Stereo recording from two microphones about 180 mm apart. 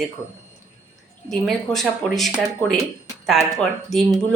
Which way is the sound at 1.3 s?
Centre (ahead or behind).